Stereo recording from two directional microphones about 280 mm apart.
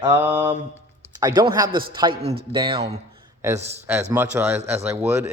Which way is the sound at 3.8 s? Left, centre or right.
Centre.